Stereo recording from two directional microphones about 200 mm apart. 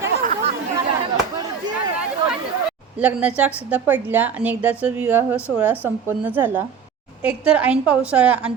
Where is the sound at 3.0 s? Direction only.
5° right (ahead or behind).